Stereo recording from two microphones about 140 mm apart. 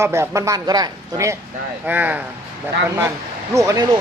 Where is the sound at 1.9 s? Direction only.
10° right (ahead or behind).